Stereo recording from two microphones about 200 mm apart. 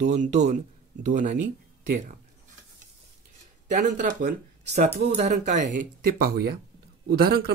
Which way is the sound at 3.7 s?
40° right (ahead or behind).